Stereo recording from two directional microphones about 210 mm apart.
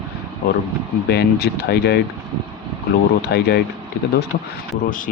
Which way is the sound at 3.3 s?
50° left (ahead or behind).